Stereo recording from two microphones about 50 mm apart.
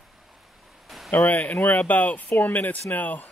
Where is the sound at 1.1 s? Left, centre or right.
Left.